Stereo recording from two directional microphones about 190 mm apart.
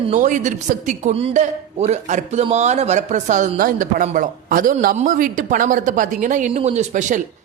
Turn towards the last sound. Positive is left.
turn(degrees=-40)  # may be behind; listen again after turning